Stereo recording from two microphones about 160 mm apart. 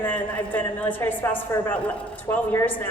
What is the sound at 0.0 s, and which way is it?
A woman's voice, 10° left (ahead or behind).